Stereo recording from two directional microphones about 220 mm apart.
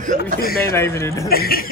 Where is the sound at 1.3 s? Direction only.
45° left (ahead or behind).